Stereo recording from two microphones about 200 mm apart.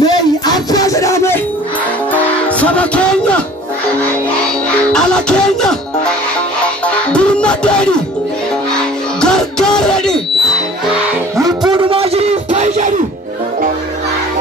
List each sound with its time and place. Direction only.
0.0 s music: 20° left (ahead or behind)
4.9 s music: 5° left (ahead or behind)
7.1 s music: 5° left (ahead or behind)
11.7 s a sound: 25° right (ahead or behind)